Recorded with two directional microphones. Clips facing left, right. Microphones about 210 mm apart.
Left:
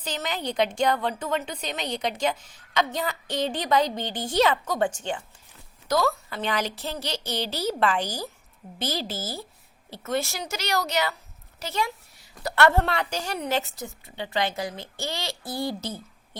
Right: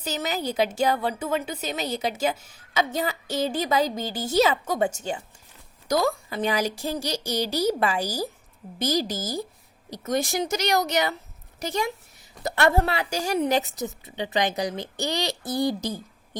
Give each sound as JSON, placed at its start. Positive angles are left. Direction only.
{"t": 0.0, "sound": "a woman's voice", "side_deg": -10}
{"t": 9.1, "sound": "a woman's voice", "side_deg": -15}
{"t": 12.4, "sound": "a child's voice", "side_deg": -20}
{"t": 12.7, "sound": "a woman's voice", "side_deg": -10}